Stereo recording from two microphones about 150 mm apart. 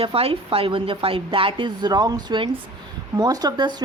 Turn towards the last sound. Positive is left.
turn(degrees=-30)  # may be behind; listen again after turning